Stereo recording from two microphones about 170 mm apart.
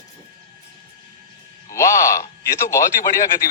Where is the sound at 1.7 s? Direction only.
15° left (ahead or behind).